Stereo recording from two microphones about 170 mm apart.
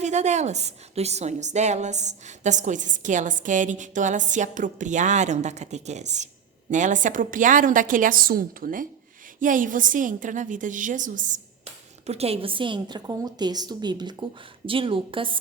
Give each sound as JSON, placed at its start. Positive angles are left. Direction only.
{"t": 0.0, "sound": "a woman's voice", "side_deg": -45}